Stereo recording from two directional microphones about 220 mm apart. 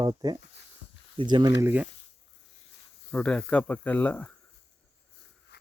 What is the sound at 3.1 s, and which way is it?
Speech, 5° left (ahead or behind).